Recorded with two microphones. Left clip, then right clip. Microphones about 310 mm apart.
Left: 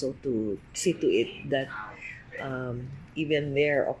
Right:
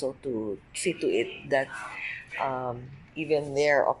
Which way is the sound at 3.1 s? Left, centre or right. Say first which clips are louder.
Right 1 dB; right.